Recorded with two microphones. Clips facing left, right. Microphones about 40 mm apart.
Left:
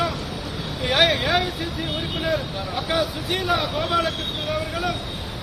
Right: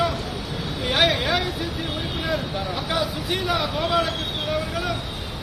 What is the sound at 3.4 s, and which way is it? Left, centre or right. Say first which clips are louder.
Speech: left 1 dB; left.